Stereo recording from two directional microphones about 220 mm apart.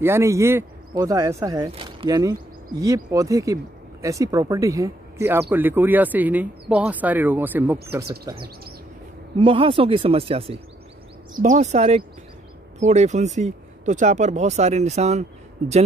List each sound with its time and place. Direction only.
0.0 s speech: 10° right (ahead or behind)
9.4 s speech: 25° right (ahead or behind)